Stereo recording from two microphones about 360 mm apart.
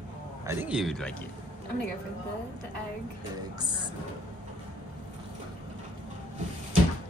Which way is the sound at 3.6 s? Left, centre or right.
Centre.